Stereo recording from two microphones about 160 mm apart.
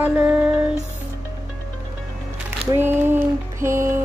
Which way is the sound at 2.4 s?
15° right (ahead or behind).